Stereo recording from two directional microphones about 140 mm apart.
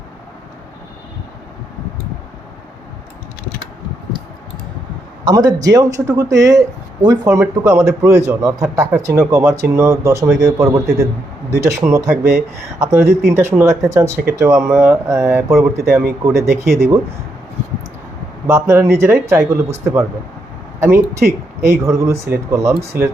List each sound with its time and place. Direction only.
5.2 s speech: 25° right (ahead or behind)
18.4 s speech: 20° right (ahead or behind)